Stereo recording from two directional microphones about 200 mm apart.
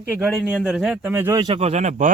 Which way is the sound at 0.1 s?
5° right (ahead or behind).